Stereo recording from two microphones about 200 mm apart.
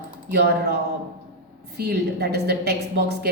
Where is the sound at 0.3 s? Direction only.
55° right (ahead or behind).